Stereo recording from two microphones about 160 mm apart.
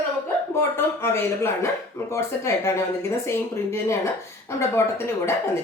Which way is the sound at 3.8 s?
15° left (ahead or behind).